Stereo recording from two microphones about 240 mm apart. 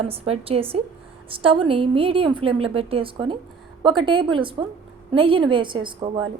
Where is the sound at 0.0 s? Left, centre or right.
Right.